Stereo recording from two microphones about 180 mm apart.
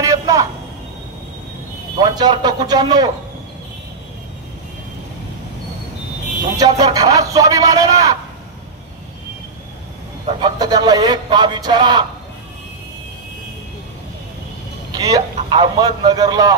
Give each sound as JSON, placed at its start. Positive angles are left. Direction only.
{"t": 0.0, "sound": "a sound", "side_deg": -20}
{"t": 2.0, "sound": "a man's voice", "side_deg": -25}
{"t": 6.5, "sound": "a man's voice", "side_deg": -20}
{"t": 10.4, "sound": "a man's voice", "side_deg": -25}
{"t": 14.9, "sound": "a man's voice", "side_deg": -20}